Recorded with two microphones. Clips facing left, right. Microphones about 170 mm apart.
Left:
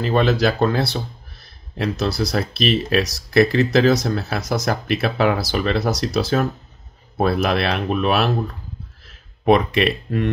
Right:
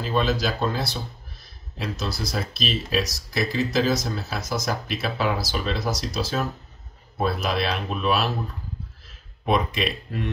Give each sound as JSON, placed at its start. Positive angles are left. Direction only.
{"t": 0.0, "sound": "speech", "side_deg": 65}
{"t": 9.4, "sound": "speech", "side_deg": 65}